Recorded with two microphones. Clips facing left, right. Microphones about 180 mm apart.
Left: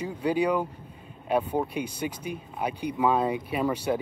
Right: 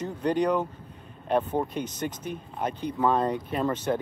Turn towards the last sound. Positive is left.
turn(degrees=10)  # may be behind; listen again after turning